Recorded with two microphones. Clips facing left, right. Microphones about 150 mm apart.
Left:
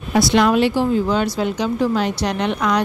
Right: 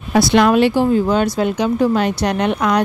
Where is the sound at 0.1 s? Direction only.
60° right (ahead or behind).